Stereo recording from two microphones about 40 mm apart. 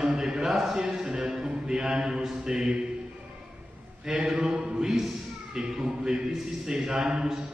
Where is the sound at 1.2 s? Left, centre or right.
Centre.